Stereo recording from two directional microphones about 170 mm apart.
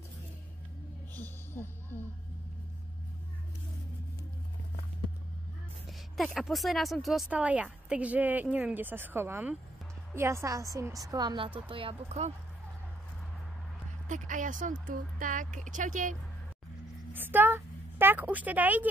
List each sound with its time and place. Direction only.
1.1 s a sound: 10° left (ahead or behind)
5.9 s a woman's voice: centre (ahead or behind); by 12.3 s 35° right (ahead or behind)
14.0 s speech: 50° right (ahead or behind)
17.1 s a woman's voice: 10° right (ahead or behind)